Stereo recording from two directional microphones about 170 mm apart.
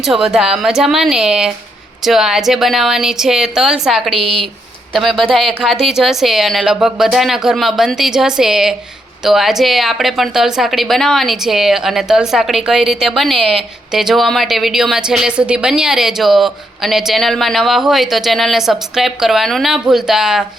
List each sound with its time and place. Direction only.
0.0 s a woman's voice: 5° right (ahead or behind)
4.2 s speech: 35° right (ahead or behind)
4.9 s a woman's voice: centre (ahead or behind)